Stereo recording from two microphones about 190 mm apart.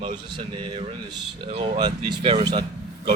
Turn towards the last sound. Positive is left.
turn(degrees=-20)  # may be behind; listen again after turning